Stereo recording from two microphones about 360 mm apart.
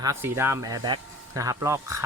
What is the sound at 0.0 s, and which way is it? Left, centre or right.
Speech, centre.